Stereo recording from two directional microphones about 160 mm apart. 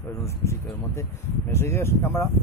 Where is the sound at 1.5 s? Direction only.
15° left (ahead or behind).